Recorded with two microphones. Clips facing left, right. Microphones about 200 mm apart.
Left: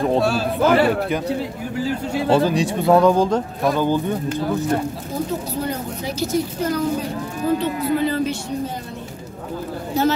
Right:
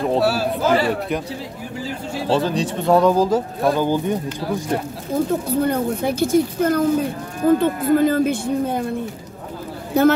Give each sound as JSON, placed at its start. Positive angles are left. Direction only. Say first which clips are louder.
{"t": 0.1, "sound": "speech", "louder": "even", "side_deg": -5}
{"t": 0.6, "sound": "a man's voice", "louder": "left 6 dB", "side_deg": 60}
{"t": 2.3, "sound": "speech", "louder": "left 2 dB", "side_deg": 10}
{"t": 2.9, "sound": "speech", "louder": "even", "side_deg": 0}
{"t": 5.5, "sound": "speech", "louder": "right 6 dB", "side_deg": -55}
{"t": 9.9, "sound": "a man's voice", "louder": "right 5 dB", "side_deg": -55}